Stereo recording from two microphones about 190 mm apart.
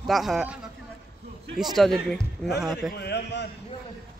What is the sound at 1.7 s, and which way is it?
Speech, centre (ahead or behind).